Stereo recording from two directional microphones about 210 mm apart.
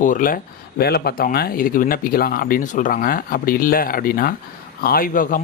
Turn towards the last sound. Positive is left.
turn(degrees=40)  # may be behind; listen again after turning